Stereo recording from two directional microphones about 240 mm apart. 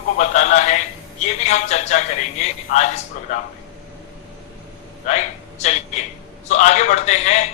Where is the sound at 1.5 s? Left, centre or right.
Left.